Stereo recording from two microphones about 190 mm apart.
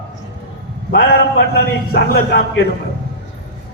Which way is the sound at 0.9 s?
60° left (ahead or behind).